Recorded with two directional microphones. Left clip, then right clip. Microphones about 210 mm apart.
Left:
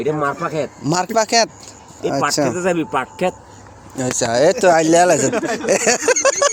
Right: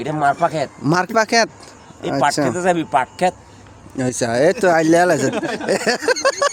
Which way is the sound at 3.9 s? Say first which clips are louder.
Left 1 dB; 30° right (ahead or behind).